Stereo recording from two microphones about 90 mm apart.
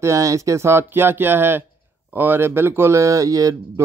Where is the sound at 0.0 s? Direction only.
35° right (ahead or behind).